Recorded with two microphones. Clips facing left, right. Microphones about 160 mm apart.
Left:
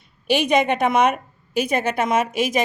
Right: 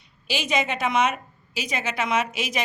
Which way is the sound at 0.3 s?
60° left (ahead or behind).